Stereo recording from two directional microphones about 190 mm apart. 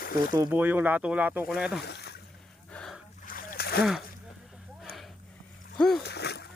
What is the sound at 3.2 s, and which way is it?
Splash, 45° left (ahead or behind).